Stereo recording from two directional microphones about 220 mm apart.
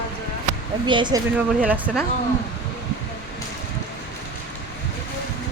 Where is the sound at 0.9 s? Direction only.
20° right (ahead or behind).